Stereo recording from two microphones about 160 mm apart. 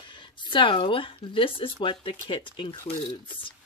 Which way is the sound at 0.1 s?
30° left (ahead or behind).